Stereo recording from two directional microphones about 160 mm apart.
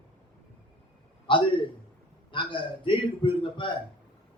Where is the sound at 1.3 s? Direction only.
30° left (ahead or behind).